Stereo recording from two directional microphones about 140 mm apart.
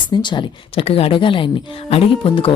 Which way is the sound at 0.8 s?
45° left (ahead or behind).